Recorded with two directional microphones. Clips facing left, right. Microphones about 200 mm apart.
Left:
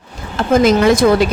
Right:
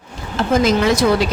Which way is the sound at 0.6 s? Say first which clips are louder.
Left 5 dB; 50° left (ahead or behind).